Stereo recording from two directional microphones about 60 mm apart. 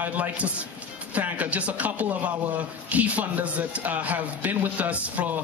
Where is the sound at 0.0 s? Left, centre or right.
Right.